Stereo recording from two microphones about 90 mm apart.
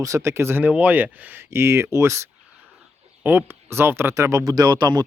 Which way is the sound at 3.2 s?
25° right (ahead or behind).